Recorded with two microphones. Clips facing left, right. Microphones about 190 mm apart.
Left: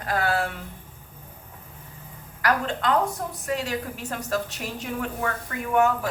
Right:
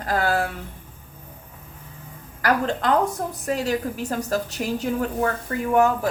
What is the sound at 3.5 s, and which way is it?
A woman's voice, 35° right (ahead or behind).